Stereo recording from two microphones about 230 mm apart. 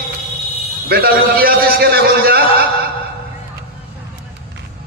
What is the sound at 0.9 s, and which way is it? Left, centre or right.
A man's voice, right.